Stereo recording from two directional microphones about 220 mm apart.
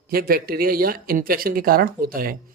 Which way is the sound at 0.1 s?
40° right (ahead or behind).